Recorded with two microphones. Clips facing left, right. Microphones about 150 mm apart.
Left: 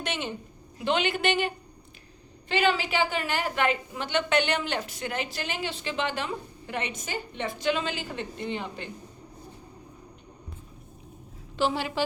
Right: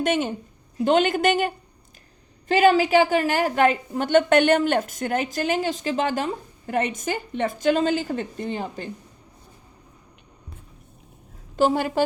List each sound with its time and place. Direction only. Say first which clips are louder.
0.0 s a woman's voice: right 10 dB; 45° right (ahead or behind)
11.5 s a woman's voice: right 7 dB; 45° right (ahead or behind)